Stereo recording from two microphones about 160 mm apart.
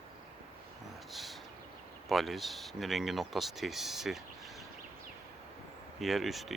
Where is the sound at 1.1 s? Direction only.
Centre (ahead or behind).